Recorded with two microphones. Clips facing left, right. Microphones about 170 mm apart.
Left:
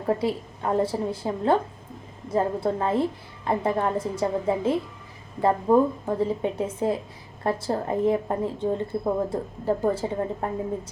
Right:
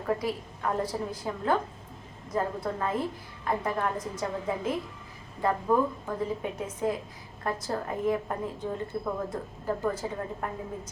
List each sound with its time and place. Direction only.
0.0 s a woman's voice: 30° left (ahead or behind)